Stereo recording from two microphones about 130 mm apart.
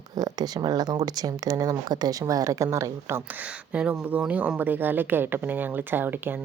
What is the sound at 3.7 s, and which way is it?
A woman's voice, 10° right (ahead or behind).